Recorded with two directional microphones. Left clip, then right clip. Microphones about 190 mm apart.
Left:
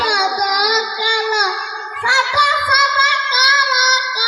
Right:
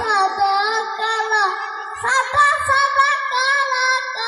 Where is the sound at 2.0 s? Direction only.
35° left (ahead or behind).